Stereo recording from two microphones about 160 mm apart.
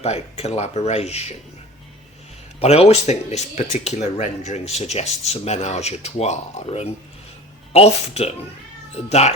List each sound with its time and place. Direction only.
0.0 s speech: 40° left (ahead or behind)
2.6 s speech: 40° left (ahead or behind)